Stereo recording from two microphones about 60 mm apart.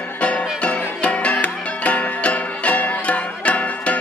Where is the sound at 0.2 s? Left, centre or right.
Left.